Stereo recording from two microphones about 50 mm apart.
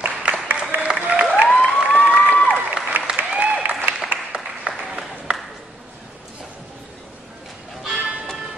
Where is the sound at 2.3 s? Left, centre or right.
Left.